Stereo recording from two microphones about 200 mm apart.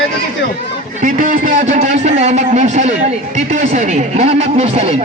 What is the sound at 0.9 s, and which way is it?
A man's voice, 40° right (ahead or behind).